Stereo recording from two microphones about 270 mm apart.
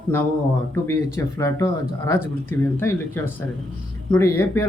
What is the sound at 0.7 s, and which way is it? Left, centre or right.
Speech, centre.